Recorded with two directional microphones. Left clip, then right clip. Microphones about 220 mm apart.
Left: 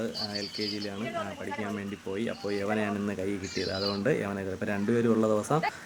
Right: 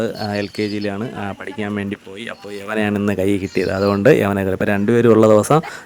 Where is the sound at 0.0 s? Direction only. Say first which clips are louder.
Right 12 dB; 45° right (ahead or behind).